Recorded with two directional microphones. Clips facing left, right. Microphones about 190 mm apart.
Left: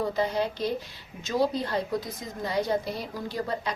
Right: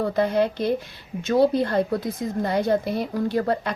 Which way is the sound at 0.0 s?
55° right (ahead or behind).